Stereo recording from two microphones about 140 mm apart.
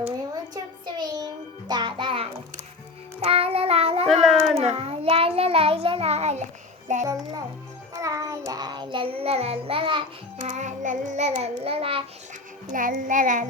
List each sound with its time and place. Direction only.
0.5 s music: 30° right (ahead or behind)
3.2 s child singing: 45° right (ahead or behind)
4.1 s cat: centre (ahead or behind)
4.5 s child singing: 45° right (ahead or behind)
7.0 s a child's voice: 25° right (ahead or behind)
7.9 s child singing: 25° right (ahead or behind)
10.4 s child singing: 60° right (ahead or behind)
11.4 s child singing: 45° right (ahead or behind)
12.7 s a child's voice: 75° right (ahead or behind)